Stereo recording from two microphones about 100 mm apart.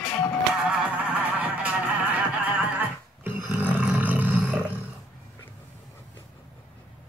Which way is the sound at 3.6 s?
15° right (ahead or behind).